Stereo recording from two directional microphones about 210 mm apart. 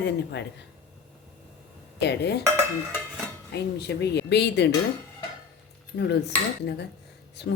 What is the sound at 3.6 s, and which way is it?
A woman's voice, 50° left (ahead or behind).